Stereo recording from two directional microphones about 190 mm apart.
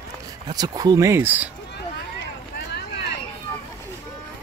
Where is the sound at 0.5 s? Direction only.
20° right (ahead or behind).